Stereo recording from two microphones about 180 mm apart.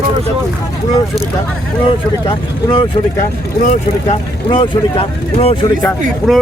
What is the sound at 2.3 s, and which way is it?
Speech, 25° left (ahead or behind).